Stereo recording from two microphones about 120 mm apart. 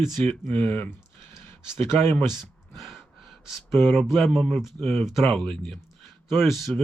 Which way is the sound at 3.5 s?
Centre (ahead or behind).